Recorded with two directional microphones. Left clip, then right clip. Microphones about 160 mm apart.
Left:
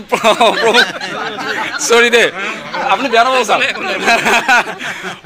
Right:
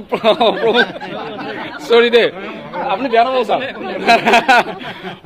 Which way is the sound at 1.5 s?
15° left (ahead or behind).